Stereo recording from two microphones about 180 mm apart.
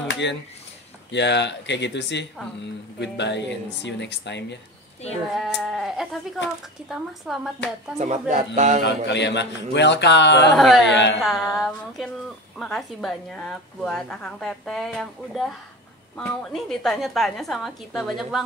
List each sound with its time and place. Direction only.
0.1 s a sound: 75° left (ahead or behind)
1.1 s speech: 75° left (ahead or behind)
5.3 s a woman's voice: centre (ahead or behind)
8.0 s a man's voice: 40° right (ahead or behind)
8.8 s speech: 75° left (ahead or behind)
10.5 s a woman's voice: centre (ahead or behind)
10.9 s speech: 80° left
11.5 s a woman's voice: centre (ahead or behind)